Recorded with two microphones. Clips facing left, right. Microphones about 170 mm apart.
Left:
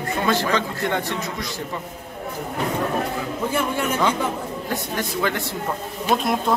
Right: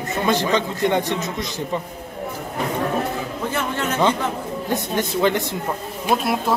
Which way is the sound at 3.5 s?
10° left (ahead or behind).